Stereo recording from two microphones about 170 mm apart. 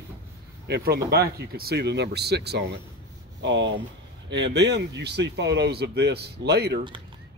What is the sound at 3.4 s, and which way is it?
Speech, 90° right.